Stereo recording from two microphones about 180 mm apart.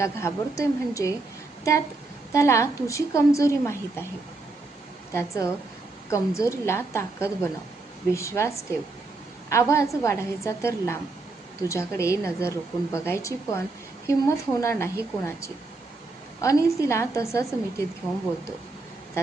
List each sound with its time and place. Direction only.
0.0 s a woman's voice: 15° left (ahead or behind)
2.3 s a woman's voice: 15° left (ahead or behind)
5.1 s a woman's voice: 15° left (ahead or behind)
19.2 s a woman's voice: 15° left (ahead or behind)